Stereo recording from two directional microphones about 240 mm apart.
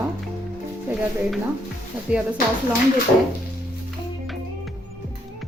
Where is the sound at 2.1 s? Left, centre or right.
Centre.